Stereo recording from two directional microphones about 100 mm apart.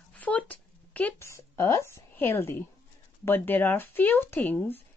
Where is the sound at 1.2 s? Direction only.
25° left (ahead or behind).